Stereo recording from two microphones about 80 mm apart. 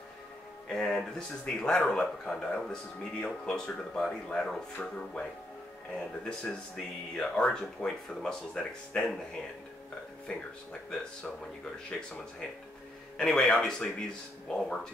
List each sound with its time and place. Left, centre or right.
0.7 s a man's voice: centre
10.2 s a man's voice: centre
13.4 s a man's voice: centre